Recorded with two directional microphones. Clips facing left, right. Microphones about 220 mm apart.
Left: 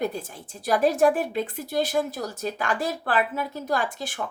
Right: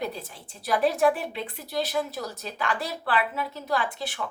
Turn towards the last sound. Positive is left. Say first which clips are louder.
# left 1 dB
turn(degrees=45)  # may be behind; listen again after turning